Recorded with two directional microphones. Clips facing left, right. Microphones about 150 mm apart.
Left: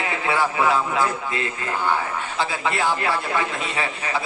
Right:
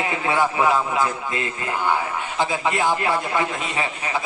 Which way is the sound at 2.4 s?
15° right (ahead or behind).